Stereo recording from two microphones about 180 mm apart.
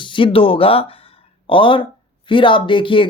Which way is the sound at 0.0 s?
25° left (ahead or behind).